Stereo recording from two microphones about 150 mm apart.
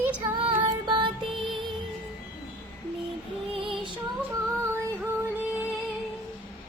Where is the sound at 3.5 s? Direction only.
35° right (ahead or behind).